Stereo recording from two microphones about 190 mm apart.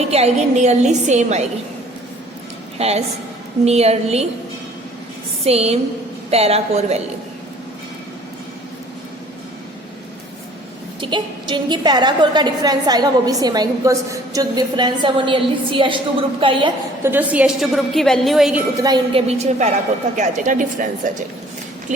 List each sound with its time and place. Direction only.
0.1 s a woman's voice: 35° right (ahead or behind)
2.7 s a woman's voice: 35° right (ahead or behind)
5.5 s a woman's voice: 30° right (ahead or behind)
11.0 s a woman's voice: 25° right (ahead or behind)
17.0 s a woman's voice: 10° right (ahead or behind)
18.8 s a woman's voice: 20° right (ahead or behind)
19.3 s a woman's voice: 35° right (ahead or behind)